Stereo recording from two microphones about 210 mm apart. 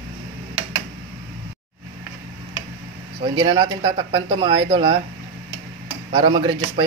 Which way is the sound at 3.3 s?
25° right (ahead or behind).